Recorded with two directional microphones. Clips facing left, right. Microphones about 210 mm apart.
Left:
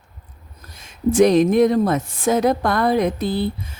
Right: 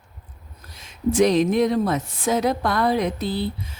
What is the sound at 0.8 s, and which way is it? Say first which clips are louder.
Speech: left 4 dB; 50° left (ahead or behind).